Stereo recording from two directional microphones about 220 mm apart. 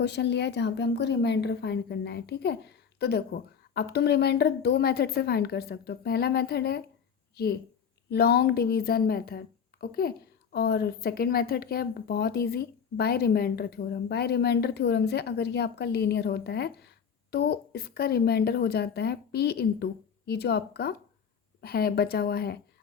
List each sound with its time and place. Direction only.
0.0 s speech: 50° left (ahead or behind)
8.1 s speech: 45° left (ahead or behind)